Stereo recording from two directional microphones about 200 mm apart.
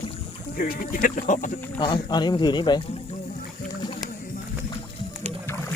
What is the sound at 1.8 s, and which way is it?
Speech, 20° left (ahead or behind).